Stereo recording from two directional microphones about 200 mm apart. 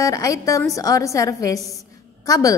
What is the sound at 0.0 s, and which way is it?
A woman's voice, 15° left (ahead or behind).